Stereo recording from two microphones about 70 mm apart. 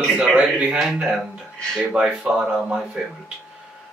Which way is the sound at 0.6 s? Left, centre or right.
Centre.